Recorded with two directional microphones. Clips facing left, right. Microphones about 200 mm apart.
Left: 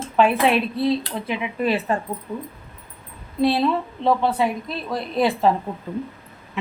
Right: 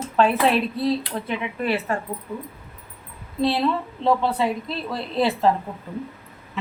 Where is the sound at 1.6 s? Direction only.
15° left (ahead or behind).